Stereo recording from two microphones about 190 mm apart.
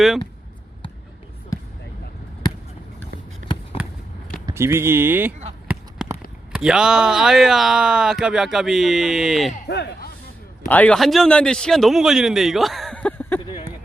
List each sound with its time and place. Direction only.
4.4 s speech: 15° right (ahead or behind)
5.6 s a sound: 10° right (ahead or behind)
6.5 s speech: 5° right (ahead or behind)
9.6 s a man's voice: 60° left (ahead or behind)
10.7 s speech: 5° left (ahead or behind)